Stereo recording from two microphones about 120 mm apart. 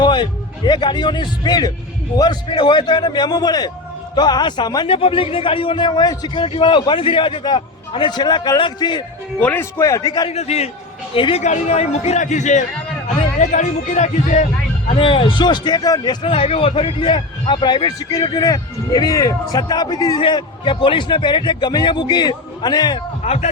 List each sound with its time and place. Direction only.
0.0 s a man's voice: 40° left (ahead or behind)
4.9 s a man's voice: 50° left (ahead or behind)
9.4 s speech: 15° left (ahead or behind)
9.7 s a man's voice: 25° left (ahead or behind)
10.2 s a man's voice: 60° left (ahead or behind)
11.1 s a man's voice: 50° left (ahead or behind)
11.4 s a man's voice: 70° left (ahead or behind)
14.9 s speech: 50° left (ahead or behind)
16.2 s speech: 55° left (ahead or behind); by 20.1 s 35° left (ahead or behind)
20.1 s speech: 45° left (ahead or behind)
23.2 s a man's voice: 65° left (ahead or behind)